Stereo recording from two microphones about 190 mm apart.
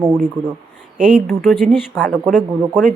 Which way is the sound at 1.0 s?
5° right (ahead or behind).